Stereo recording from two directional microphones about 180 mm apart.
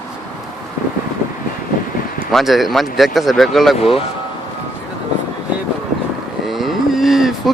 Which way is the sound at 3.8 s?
30° left (ahead or behind).